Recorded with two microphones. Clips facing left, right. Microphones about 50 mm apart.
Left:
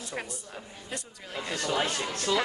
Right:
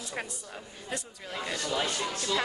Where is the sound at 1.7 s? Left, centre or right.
Left.